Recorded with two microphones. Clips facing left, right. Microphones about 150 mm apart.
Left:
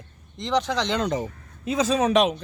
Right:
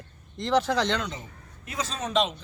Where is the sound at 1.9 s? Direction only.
75° left (ahead or behind).